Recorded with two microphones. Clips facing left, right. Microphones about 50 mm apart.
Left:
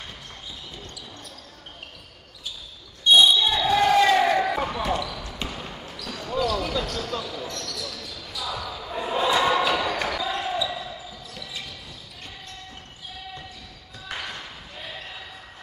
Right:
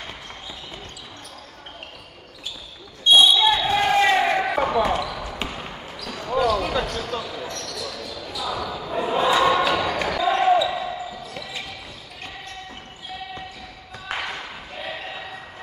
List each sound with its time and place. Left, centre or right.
3.0 s basketball bounce: right
3.5 s basketball bounce: right
10.2 s basketball bounce: right
14.0 s music: right
14.9 s basketball bounce: right